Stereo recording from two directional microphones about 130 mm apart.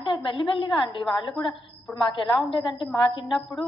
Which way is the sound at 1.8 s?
5° left (ahead or behind).